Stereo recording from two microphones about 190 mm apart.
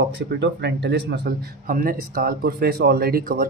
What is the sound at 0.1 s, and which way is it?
Speech, 65° right (ahead or behind).